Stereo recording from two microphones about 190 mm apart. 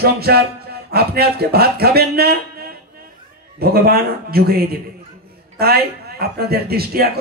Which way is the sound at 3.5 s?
55° right (ahead or behind).